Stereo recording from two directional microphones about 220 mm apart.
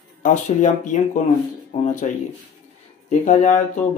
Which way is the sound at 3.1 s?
35° left (ahead or behind).